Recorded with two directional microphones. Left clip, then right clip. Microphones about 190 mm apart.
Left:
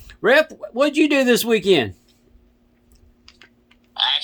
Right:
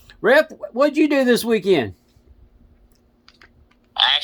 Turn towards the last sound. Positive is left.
turn(degrees=-30)  # may be behind; listen again after turning